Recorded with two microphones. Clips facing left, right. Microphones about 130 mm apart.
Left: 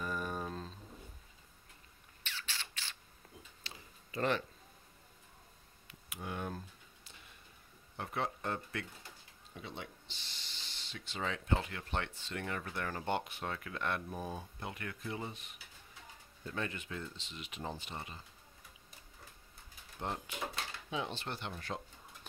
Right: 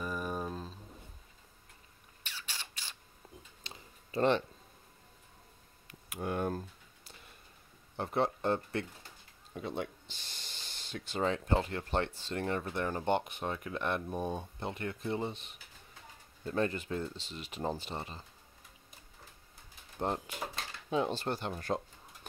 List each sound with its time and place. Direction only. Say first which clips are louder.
0.0 s a sound: right 2 dB; 10° right (ahead or behind)
2.2 s rodents: even; 15° right (ahead or behind)
3.6 s a sound: right 2 dB; 20° right (ahead or behind)
4.1 s speech: right 6 dB; 25° right (ahead or behind)
5.9 s a sound: right 7 dB; 50° right (ahead or behind)
8.0 s speech: right 7 dB; 35° right (ahead or behind)
9.5 s speech: right 9 dB; 45° right (ahead or behind); by 15.5 s 30° right (ahead or behind)
16.5 s speech: right 8 dB; 40° right (ahead or behind)
20.0 s speech: right 5 dB; 40° right (ahead or behind)